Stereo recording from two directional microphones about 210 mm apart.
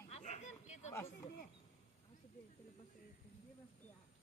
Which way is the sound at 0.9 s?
15° left (ahead or behind).